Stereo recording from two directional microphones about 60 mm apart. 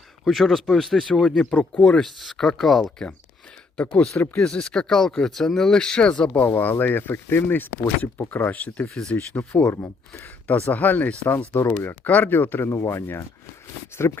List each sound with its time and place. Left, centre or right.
0.3 s speech: centre
1.5 s speech: centre
2.0 s speech: centre
3.8 s speech: centre
9.6 s speech: left
10.4 s speech: left
12.7 s speech: left